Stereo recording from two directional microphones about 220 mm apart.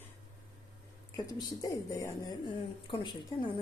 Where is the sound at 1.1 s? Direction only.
15° left (ahead or behind).